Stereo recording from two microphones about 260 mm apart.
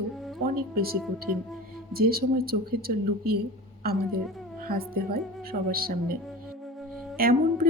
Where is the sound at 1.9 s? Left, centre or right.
Right.